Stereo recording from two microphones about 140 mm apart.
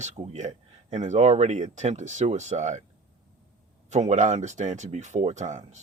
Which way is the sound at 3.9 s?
60° right (ahead or behind).